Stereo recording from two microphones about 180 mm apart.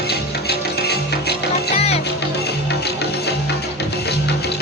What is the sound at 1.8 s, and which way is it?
Music, 35° left (ahead or behind).